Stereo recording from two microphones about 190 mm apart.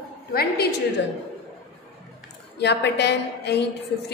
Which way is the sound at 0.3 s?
55° left (ahead or behind).